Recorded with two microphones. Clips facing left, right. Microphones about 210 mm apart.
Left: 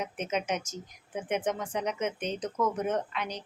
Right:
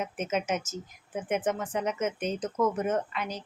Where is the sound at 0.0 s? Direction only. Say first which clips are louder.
Right 2 dB; 5° right (ahead or behind).